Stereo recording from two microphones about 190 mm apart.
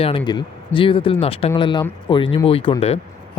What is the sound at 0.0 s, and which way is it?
Speech, 30° left (ahead or behind).